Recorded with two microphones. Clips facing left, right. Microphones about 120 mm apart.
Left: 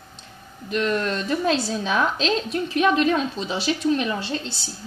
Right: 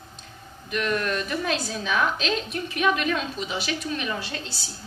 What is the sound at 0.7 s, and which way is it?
A woman's voice, 30° left (ahead or behind).